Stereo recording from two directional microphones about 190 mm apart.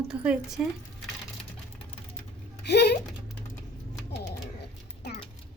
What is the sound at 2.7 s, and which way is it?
Speech, 60° left (ahead or behind).